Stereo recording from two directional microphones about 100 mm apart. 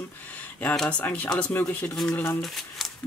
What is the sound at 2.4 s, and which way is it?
Speech, centre (ahead or behind).